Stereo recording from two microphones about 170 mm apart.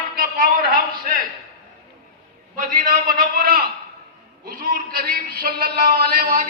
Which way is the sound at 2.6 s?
55° right (ahead or behind).